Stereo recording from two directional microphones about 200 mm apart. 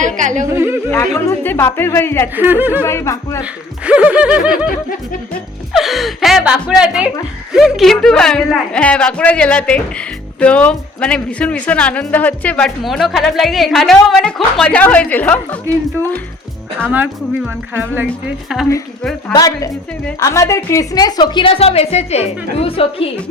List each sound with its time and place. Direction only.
0.0 s speech: 40° right (ahead or behind)
0.4 s speech: 15° right (ahead or behind)
0.9 s speech: 15° left (ahead or behind)
2.3 s speech: 10° right (ahead or behind)
2.8 s speech: 15° left (ahead or behind)
3.8 s speech: 5° right (ahead or behind)
5.7 s speech: centre (ahead or behind)
16.8 s speech: 10° right (ahead or behind)
19.3 s a woman's voice: 20° left (ahead or behind)